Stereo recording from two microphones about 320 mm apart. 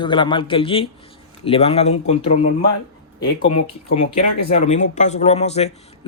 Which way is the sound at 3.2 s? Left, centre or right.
Centre.